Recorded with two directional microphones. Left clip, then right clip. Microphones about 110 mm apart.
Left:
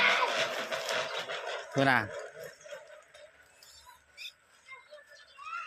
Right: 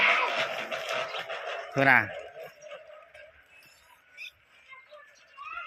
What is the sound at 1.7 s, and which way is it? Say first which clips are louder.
Speech: right 5 dB; 15° left (ahead or behind).